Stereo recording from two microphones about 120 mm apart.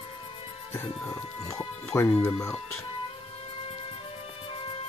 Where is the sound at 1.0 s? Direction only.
25° left (ahead or behind).